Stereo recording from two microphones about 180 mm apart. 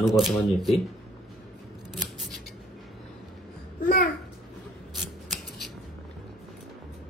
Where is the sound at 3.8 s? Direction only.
55° left (ahead or behind).